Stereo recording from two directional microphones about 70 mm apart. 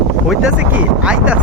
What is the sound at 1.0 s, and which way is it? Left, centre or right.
Speech, centre.